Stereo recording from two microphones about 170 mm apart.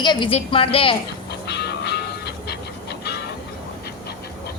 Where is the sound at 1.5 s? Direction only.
80° left.